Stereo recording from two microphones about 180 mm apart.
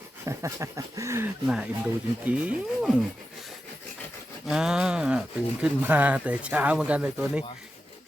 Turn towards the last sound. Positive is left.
turn(degrees=-10)  # may be behind; listen again after turning